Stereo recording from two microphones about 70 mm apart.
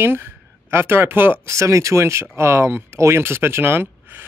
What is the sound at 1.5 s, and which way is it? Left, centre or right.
Speech, right.